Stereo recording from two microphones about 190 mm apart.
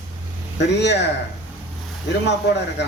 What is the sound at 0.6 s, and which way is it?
Speech, 65° left (ahead or behind).